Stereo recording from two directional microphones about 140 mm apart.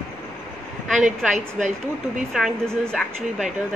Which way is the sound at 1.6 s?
60° right (ahead or behind).